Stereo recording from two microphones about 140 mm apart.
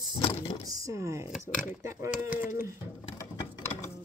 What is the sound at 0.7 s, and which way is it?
Speech, 25° right (ahead or behind).